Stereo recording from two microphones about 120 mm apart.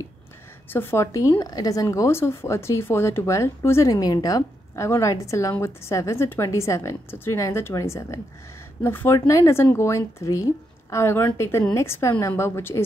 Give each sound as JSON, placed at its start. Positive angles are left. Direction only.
{"t": 0.7, "sound": "speech", "side_deg": 20}